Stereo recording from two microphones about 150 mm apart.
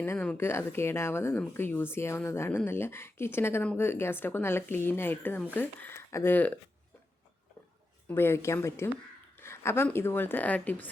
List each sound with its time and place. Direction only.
0.0 s speech: 10° left (ahead or behind)
8.0 s speech: 15° left (ahead or behind)